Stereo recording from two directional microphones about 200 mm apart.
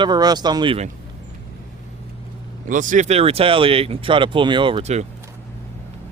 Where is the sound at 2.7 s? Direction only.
40° right (ahead or behind).